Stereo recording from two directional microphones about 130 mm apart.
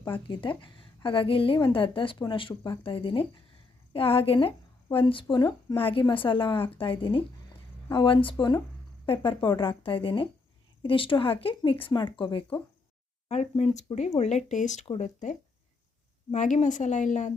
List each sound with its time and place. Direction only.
0.0 s a woman's voice: 40° left (ahead or behind)
13.2 s a woman's voice: 60° left (ahead or behind)